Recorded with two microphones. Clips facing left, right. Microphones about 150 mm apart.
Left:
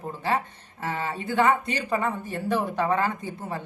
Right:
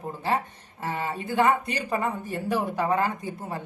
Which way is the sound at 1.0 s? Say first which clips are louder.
Even; 15° right (ahead or behind).